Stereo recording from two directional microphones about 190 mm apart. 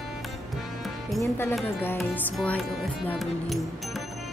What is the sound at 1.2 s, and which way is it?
Speech, 10° left (ahead or behind).